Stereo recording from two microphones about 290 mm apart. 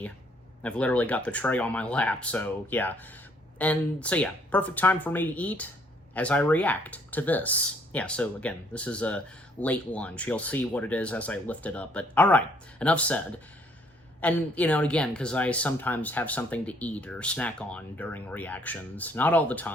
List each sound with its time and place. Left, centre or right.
0.6 s speech: centre